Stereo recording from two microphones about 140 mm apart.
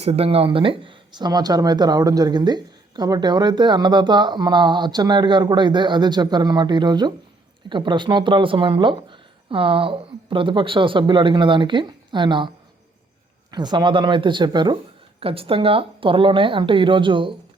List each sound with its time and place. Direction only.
0.0 s speech: 45° right (ahead or behind)
13.5 s speech: 30° right (ahead or behind)
15.2 s speech: 40° right (ahead or behind)